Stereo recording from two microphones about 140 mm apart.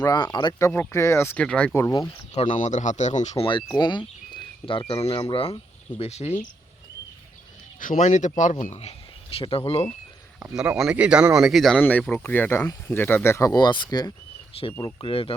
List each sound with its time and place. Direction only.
0.0 s speech: 30° left (ahead or behind)
0.7 s speech: 20° left (ahead or behind)
1.7 s speech: 25° left (ahead or behind)
2.3 s speech: 45° left (ahead or behind)
2.6 s speech: 60° left (ahead or behind)
3.8 s speech: 35° left (ahead or behind); by 6.3 s 50° left (ahead or behind)
7.8 s speech: 65° left (ahead or behind); by 9.8 s 45° left (ahead or behind)
10.6 s speech: 5° right (ahead or behind); by 15.3 s 40° left (ahead or behind)